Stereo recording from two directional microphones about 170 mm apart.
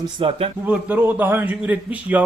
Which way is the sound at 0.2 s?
35° right (ahead or behind).